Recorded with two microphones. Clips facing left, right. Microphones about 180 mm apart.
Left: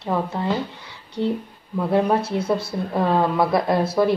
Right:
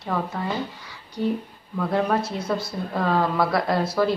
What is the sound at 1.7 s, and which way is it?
Speech, 20° left (ahead or behind).